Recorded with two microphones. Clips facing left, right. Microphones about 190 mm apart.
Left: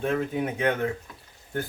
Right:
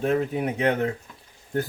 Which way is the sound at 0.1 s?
30° right (ahead or behind).